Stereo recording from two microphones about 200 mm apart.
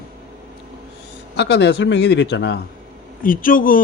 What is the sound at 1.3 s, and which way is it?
A man's voice, 60° left (ahead or behind).